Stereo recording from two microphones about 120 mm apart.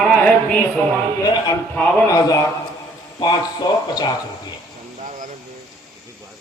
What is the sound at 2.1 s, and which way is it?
A man's voice, 30° left (ahead or behind).